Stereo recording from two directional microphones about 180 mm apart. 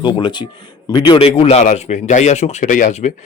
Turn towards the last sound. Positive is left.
turn(degrees=45)  # may be behind; listen again after turning